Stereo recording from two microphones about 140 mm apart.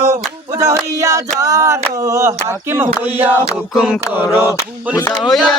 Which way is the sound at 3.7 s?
Centre (ahead or behind).